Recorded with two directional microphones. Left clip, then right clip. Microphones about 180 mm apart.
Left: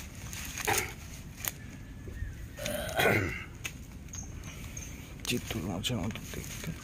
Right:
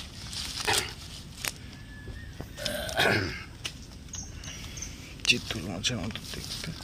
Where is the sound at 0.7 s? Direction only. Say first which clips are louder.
Right 3 dB; 20° left (ahead or behind).